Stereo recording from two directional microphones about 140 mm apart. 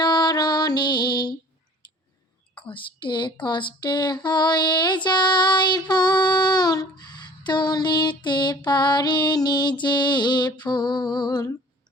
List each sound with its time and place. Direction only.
0.0 s music: 30° left (ahead or behind)
2.6 s speech: 35° left (ahead or behind)